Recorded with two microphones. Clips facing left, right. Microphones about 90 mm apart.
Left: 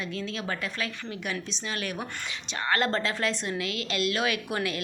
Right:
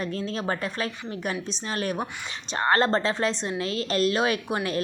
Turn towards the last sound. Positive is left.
turn(degrees=-35)  # may be behind; listen again after turning